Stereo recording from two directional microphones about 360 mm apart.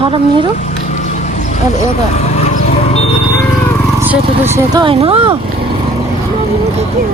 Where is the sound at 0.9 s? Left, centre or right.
Centre.